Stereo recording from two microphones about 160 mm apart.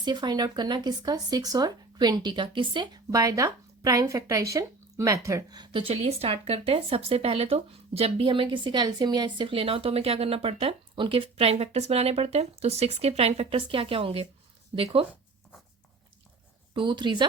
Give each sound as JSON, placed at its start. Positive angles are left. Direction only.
{"t": 0.0, "sound": "speech", "side_deg": -25}
{"t": 16.7, "sound": "a woman's voice", "side_deg": -30}